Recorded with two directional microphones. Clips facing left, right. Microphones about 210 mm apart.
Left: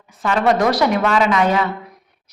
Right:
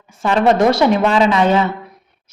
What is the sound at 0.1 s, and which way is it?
A woman's voice, 25° right (ahead or behind).